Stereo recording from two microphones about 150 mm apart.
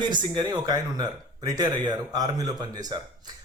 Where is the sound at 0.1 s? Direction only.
30° right (ahead or behind).